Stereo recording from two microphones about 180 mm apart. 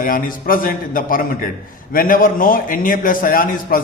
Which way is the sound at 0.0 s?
50° left (ahead or behind).